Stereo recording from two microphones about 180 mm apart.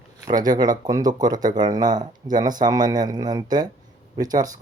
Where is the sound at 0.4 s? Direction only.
20° right (ahead or behind).